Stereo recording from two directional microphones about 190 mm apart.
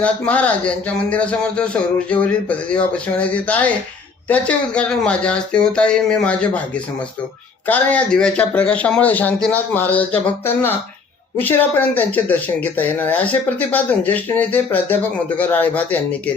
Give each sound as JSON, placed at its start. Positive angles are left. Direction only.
{"t": 0.0, "sound": "speech", "side_deg": 5}